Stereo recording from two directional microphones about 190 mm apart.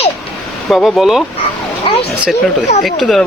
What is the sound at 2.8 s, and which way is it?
Speech, centre (ahead or behind).